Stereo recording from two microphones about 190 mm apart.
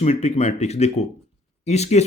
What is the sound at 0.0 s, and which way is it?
Speech, 35° left (ahead or behind).